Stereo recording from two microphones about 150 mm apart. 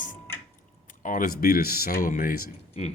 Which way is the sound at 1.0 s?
65° left (ahead or behind).